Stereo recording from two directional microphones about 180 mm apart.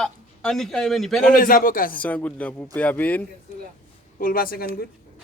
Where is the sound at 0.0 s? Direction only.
5° left (ahead or behind).